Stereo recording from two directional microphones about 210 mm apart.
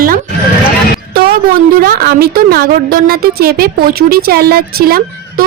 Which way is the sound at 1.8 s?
45° right (ahead or behind).